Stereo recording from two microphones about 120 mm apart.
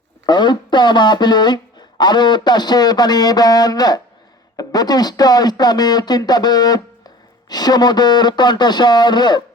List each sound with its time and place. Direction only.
0.3 s speech: 40° left (ahead or behind)